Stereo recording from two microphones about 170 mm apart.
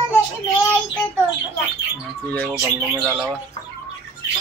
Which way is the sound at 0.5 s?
10° left (ahead or behind).